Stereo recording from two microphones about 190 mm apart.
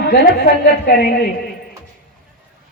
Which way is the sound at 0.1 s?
55° left (ahead or behind).